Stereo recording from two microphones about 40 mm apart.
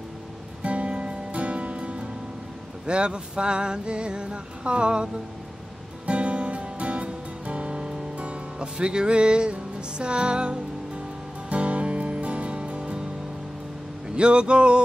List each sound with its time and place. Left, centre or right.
0.6 s music: right
14.1 s music: right